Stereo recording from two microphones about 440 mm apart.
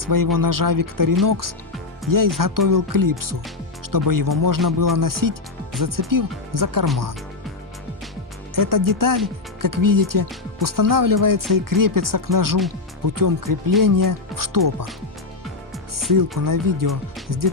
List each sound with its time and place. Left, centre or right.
0.0 s speech: right
8.5 s speech: right
16.4 s speech: right